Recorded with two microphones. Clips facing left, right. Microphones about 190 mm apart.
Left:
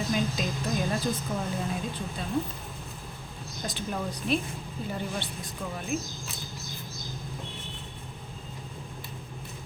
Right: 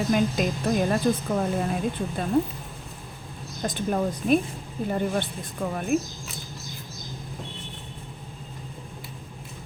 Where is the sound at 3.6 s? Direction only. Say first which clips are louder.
Right 8 dB; 50° right (ahead or behind).